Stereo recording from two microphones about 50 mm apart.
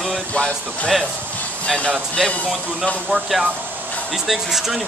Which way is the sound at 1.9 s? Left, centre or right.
Centre.